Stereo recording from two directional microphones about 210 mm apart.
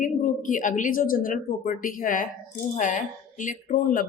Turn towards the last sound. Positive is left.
turn(degrees=40)  # may be behind; listen again after turning